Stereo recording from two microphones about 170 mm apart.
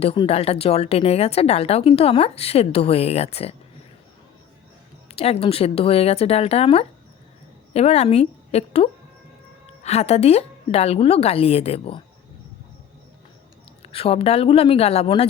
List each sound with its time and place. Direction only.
0.0 s a woman's voice: 35° left (ahead or behind)
5.0 s a woman's voice: 35° left (ahead or behind)
13.8 s a woman's voice: 35° left (ahead or behind)